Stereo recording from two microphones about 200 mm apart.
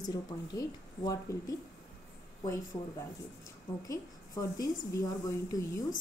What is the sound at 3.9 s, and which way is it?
A woman's voice, 15° left (ahead or behind).